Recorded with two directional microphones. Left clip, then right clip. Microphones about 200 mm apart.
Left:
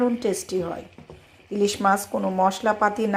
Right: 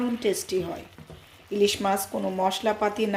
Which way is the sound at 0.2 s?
10° left (ahead or behind).